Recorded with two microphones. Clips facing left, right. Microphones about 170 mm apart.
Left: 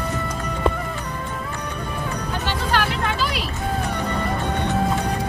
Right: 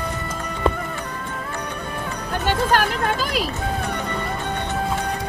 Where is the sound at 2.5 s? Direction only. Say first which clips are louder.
Right 4 dB; 45° right (ahead or behind).